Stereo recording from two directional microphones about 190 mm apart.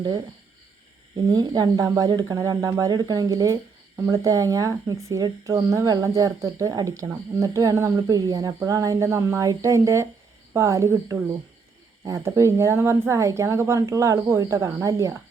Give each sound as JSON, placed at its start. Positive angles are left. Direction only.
{"t": 1.1, "sound": "speech", "side_deg": -20}